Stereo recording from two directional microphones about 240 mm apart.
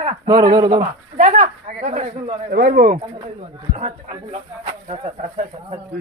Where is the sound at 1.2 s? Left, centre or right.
Right.